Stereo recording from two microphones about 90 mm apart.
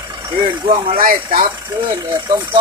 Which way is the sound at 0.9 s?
85° right.